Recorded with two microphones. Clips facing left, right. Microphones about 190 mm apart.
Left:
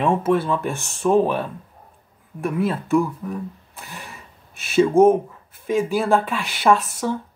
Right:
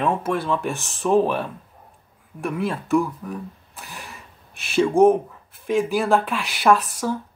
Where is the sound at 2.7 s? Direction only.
Centre (ahead or behind).